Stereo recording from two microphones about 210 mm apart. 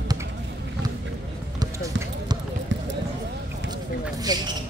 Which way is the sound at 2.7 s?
60° right (ahead or behind).